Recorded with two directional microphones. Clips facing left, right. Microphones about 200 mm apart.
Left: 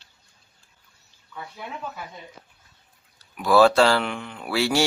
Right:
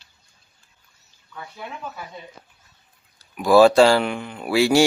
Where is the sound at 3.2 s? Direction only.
15° right (ahead or behind).